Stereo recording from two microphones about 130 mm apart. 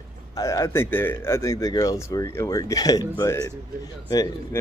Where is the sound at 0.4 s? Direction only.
25° left (ahead or behind).